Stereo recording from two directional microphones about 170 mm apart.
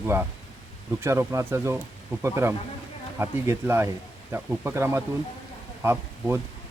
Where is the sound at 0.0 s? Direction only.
15° right (ahead or behind).